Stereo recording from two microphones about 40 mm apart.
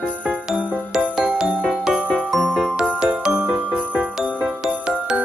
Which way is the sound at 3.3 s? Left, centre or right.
Right.